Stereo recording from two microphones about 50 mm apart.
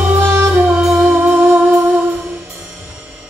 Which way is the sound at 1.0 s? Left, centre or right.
Right.